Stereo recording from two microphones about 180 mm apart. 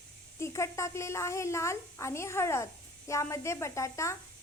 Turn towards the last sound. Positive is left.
turn(degrees=15)  # may be behind; listen again after turning